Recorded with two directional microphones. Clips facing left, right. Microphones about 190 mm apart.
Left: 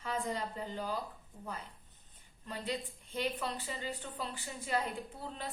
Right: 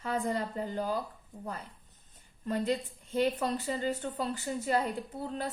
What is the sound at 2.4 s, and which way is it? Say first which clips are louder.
Speech: right 8 dB; 45° right (ahead or behind).